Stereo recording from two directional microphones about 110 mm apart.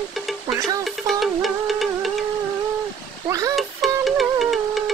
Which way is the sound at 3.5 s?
Centre (ahead or behind).